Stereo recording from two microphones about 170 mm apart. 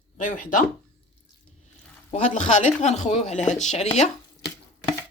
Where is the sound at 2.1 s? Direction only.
45° left (ahead or behind).